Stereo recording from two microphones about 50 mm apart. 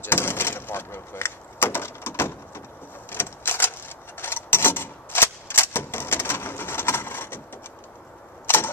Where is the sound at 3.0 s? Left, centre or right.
Left.